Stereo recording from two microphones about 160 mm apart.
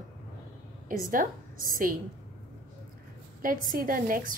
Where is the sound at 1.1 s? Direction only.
60° right (ahead or behind).